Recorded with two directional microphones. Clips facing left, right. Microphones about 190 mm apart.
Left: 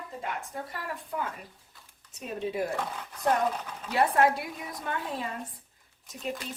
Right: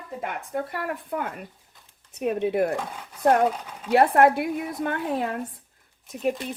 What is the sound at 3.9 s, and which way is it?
Speech, 60° right (ahead or behind).